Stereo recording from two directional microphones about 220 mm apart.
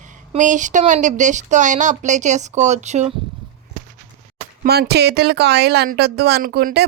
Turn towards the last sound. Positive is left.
turn(degrees=-45)  # may be behind; listen again after turning